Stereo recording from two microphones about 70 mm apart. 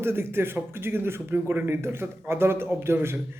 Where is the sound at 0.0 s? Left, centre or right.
Right.